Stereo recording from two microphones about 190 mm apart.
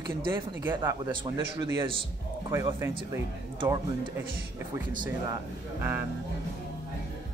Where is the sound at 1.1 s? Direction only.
25° right (ahead or behind).